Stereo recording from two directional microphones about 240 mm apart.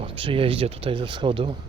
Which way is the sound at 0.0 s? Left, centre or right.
Right.